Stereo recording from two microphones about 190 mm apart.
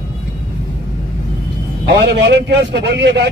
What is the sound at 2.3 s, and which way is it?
Speech, 60° right (ahead or behind).